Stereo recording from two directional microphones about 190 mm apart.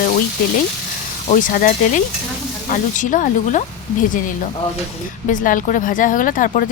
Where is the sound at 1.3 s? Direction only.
45° left (ahead or behind).